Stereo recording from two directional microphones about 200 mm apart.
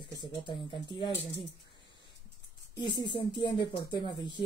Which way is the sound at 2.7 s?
20° left (ahead or behind).